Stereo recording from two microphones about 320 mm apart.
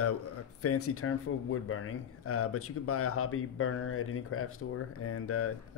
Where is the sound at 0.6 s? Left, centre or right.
Left.